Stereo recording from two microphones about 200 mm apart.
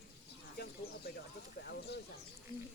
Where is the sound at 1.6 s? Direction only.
55° left (ahead or behind).